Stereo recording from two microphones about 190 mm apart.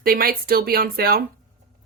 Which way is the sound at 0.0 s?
50° right (ahead or behind).